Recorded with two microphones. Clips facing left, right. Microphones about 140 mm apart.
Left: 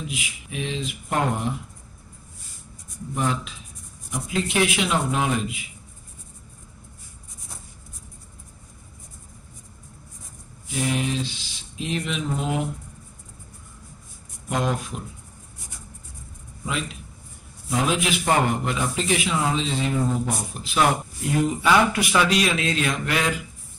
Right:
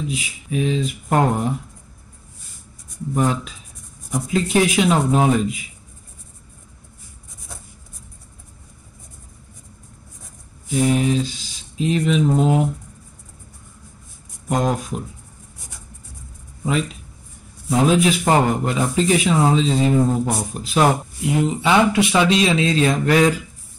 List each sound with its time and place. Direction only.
0.1 s a man's voice: 40° right (ahead or behind)
3.2 s a man's voice: 40° right (ahead or behind)
10.8 s speech: 40° right (ahead or behind)
14.5 s speech: 40° right (ahead or behind)
17.6 s a man's voice: 40° right (ahead or behind)
21.2 s speech: 20° right (ahead or behind); by 23.4 s 40° right (ahead or behind)